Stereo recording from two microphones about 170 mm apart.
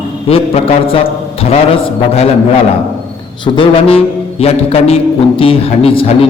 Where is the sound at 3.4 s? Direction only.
30° left (ahead or behind).